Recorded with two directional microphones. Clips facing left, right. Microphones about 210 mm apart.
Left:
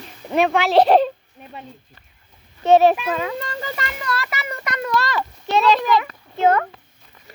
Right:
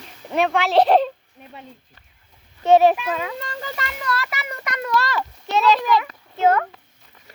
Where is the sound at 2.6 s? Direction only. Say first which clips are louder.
Left 1 dB; 10° right (ahead or behind).